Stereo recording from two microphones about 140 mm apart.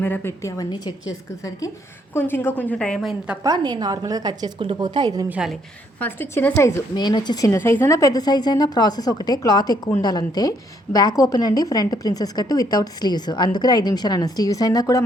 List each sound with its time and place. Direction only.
0.0 s a woman's voice: 15° left (ahead or behind)
2.1 s a woman's voice: 15° left (ahead or behind); by 3.3 s centre (ahead or behind)
3.4 s a woman's voice: 30° right (ahead or behind)
5.3 s a woman's voice: 5° right (ahead or behind)
6.0 s a woman's voice: 15° left (ahead or behind)